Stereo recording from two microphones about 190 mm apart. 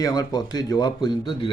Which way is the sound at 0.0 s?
20° left (ahead or behind).